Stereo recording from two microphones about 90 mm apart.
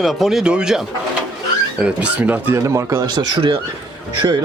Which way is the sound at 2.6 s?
35° right (ahead or behind).